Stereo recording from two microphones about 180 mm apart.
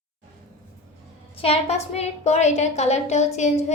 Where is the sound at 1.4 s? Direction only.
35° left (ahead or behind).